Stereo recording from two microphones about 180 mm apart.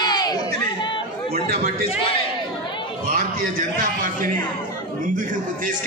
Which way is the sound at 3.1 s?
45° right (ahead or behind).